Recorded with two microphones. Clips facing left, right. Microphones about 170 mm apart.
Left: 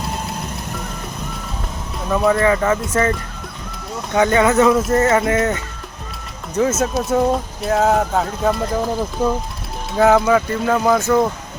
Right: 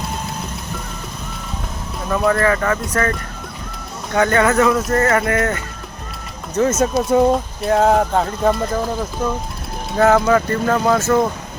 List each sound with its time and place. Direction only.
2.0 s speech: 5° left (ahead or behind)
2.4 s speech: 15° left (ahead or behind)
4.1 s speech: 15° left (ahead or behind)
4.9 s speech: 20° left (ahead or behind)
6.5 s speech: 10° left (ahead or behind)